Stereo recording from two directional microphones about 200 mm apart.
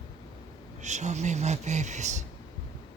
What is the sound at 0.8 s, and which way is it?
Speech, 35° right (ahead or behind).